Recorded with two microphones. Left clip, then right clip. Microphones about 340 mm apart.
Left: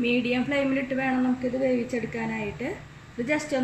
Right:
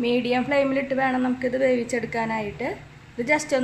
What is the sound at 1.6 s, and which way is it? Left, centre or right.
Speech, right.